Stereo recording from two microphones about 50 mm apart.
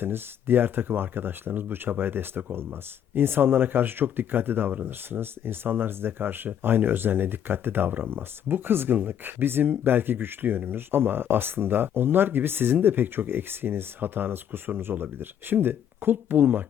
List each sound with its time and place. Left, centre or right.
0.0 s speech: right